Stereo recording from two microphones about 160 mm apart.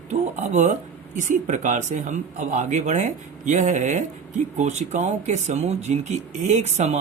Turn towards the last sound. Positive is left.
turn(degrees=-45)  # may be behind; listen again after turning